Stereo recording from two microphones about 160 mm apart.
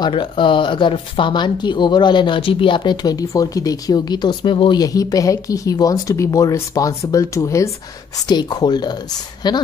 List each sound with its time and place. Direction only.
0.0 s a woman's voice: 30° left (ahead or behind)